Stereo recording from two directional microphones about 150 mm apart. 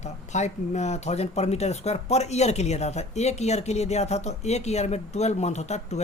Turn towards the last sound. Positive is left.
turn(degrees=50)  # may be behind; listen again after turning